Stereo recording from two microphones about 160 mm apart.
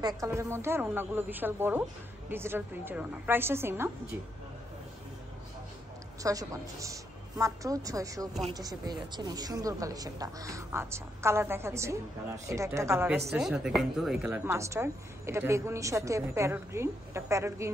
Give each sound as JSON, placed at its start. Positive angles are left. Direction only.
{"t": 0.0, "sound": "a woman's voice", "side_deg": -20}
{"t": 6.2, "sound": "a woman's voice", "side_deg": -20}
{"t": 13.4, "sound": "a woman's voice", "side_deg": -5}